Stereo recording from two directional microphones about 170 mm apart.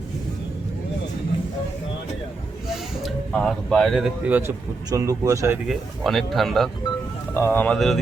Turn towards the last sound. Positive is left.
turn(degrees=0)  # may be behind; listen again after turning